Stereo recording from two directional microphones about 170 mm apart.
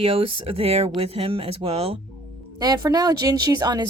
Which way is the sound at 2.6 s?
25° right (ahead or behind).